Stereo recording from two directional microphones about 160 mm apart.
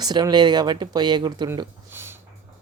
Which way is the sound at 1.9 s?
15° right (ahead or behind).